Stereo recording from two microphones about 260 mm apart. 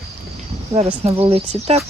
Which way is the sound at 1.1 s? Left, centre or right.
Right.